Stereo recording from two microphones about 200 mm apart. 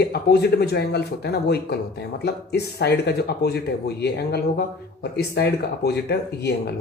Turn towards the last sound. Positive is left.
turn(degrees=55)  # may be behind; listen again after turning